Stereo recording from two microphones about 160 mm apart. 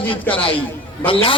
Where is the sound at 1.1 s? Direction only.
35° left (ahead or behind).